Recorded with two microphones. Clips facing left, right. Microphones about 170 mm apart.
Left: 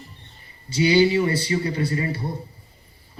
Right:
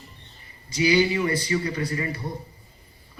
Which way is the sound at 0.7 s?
30° left (ahead or behind).